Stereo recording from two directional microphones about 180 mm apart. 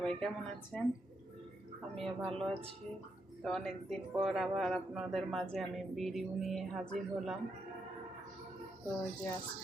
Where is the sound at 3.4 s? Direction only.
Centre (ahead or behind).